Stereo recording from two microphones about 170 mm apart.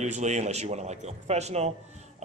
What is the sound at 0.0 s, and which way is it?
A man's voice, 45° right (ahead or behind).